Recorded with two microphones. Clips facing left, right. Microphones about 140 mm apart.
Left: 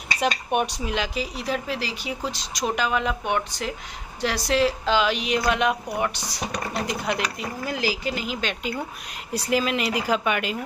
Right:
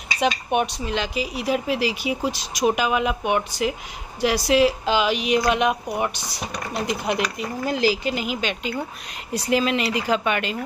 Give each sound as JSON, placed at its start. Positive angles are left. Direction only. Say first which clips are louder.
{"t": 0.5, "sound": "speech", "louder": "right 2 dB", "side_deg": 10}
{"t": 8.4, "sound": "speech", "louder": "right 2 dB", "side_deg": 0}